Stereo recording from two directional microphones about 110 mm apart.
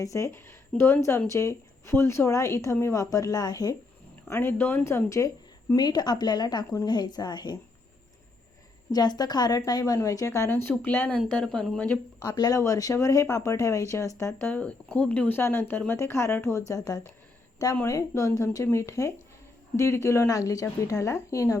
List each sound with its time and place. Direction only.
0.0 s speech: 30° left (ahead or behind)
4.3 s speech: 20° left (ahead or behind)
5.7 s speech: 40° left (ahead or behind)
8.9 s speech: 40° left (ahead or behind); by 11.9 s 5° left (ahead or behind)
12.2 s speech: 35° left (ahead or behind)
14.5 s speech: 10° left (ahead or behind); by 21.6 s 30° left (ahead or behind)